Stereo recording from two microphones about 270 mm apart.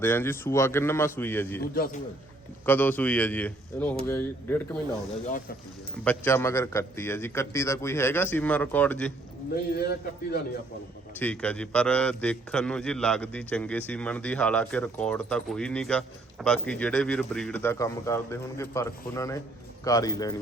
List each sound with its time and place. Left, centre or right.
0.0 s a man's voice: centre
1.7 s a man's voice: left
2.6 s a man's voice: centre
6.1 s a man's voice: centre
9.7 s a man's voice: left
11.2 s a man's voice: centre